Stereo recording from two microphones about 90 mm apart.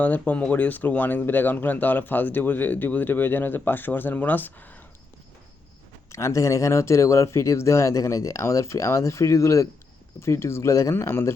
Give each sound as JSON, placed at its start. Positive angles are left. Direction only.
{"t": 0.0, "sound": "speech", "side_deg": 15}
{"t": 6.1, "sound": "speech", "side_deg": 35}